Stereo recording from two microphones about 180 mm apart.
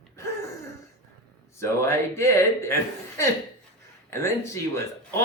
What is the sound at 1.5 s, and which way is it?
Speech, 15° left (ahead or behind).